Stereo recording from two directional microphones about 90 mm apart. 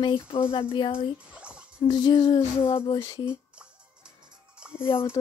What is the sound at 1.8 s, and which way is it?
Female singing, 60° left (ahead or behind).